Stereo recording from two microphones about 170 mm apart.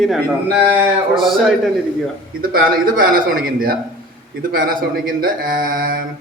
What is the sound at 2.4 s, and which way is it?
Speech, 55° right (ahead or behind).